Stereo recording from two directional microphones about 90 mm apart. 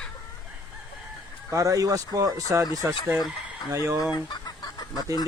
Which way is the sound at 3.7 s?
35° right (ahead or behind).